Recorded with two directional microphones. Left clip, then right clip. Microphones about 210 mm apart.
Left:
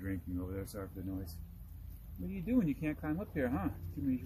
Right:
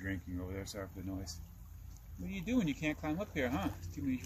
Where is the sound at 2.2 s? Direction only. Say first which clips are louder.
Left 1 dB; 5° left (ahead or behind).